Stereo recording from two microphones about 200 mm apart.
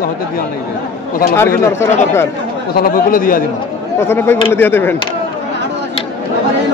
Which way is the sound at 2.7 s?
45° left (ahead or behind).